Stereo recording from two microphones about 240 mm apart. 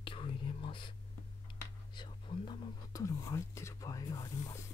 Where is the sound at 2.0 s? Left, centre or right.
Centre.